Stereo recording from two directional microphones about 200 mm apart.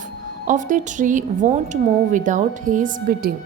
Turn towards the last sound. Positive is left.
turn(degrees=-45)  # may be behind; listen again after turning